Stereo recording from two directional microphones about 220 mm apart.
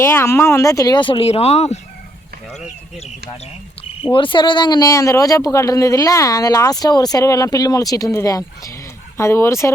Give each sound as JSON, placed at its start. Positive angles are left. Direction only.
{"t": 0.0, "sound": "speech", "side_deg": 10}
{"t": 4.0, "sound": "speech", "side_deg": 20}